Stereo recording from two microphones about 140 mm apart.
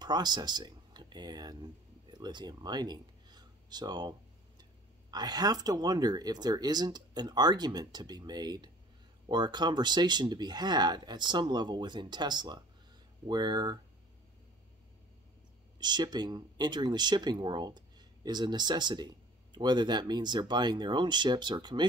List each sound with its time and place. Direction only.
0.0 s speech: 30° right (ahead or behind)
5.1 s speech: 30° right (ahead or behind)
15.8 s speech: 30° right (ahead or behind)